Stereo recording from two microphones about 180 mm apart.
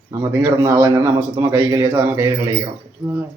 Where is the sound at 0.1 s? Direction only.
15° right (ahead or behind).